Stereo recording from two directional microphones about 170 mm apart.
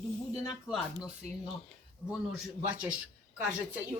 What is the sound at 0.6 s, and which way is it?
Speech, 5° right (ahead or behind).